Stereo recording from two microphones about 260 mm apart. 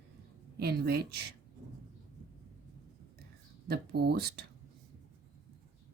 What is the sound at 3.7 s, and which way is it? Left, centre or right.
Speech, right.